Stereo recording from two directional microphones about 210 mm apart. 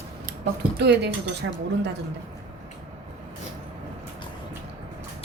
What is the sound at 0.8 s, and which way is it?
Speech, 50° right (ahead or behind).